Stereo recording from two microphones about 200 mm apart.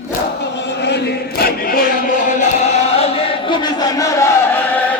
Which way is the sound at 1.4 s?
45° left (ahead or behind).